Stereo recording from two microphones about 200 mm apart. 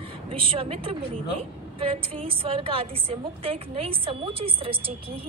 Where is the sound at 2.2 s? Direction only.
30° right (ahead or behind).